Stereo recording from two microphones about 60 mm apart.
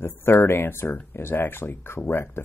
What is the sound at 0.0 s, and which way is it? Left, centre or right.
Speech, left.